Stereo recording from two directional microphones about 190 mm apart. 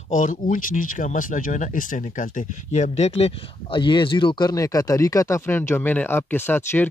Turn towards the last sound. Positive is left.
turn(degrees=10)  # may be behind; listen again after turning